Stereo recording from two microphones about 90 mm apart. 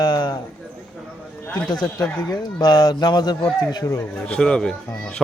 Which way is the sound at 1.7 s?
55° left (ahead or behind).